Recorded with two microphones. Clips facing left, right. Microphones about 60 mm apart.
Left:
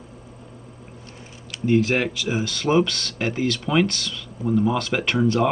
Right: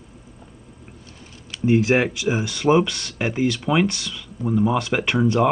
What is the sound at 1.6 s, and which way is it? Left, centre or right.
Speech, centre.